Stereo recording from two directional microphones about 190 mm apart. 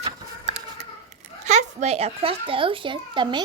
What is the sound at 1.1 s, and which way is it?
A child's voice, 35° right (ahead or behind).